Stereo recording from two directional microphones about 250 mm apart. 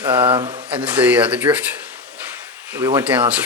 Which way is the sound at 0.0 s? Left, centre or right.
Centre.